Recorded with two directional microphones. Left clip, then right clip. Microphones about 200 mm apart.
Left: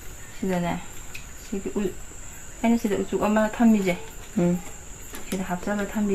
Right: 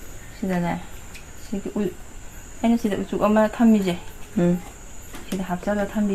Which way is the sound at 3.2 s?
40° right (ahead or behind).